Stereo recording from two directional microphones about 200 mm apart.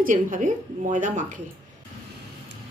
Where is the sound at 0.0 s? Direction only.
40° right (ahead or behind).